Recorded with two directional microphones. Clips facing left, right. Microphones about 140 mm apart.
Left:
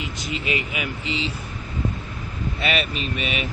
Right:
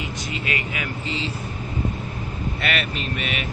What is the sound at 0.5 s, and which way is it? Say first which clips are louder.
Speech: left 2 dB; 20° left (ahead or behind).